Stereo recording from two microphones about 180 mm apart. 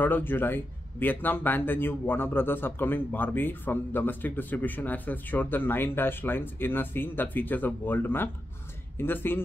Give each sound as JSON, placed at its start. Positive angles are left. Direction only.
{"t": 0.0, "sound": "a man's voice", "side_deg": 10}